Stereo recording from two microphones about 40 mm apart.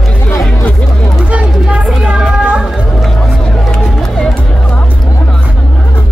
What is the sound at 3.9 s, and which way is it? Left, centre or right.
Music, centre.